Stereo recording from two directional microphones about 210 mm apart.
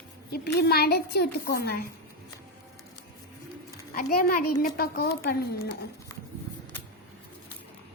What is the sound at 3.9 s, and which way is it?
A woman's voice, 45° left (ahead or behind).